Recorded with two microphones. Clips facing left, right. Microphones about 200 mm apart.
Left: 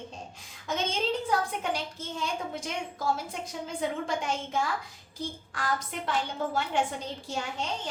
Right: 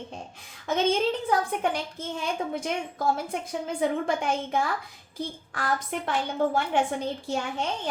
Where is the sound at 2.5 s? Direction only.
55° right (ahead or behind).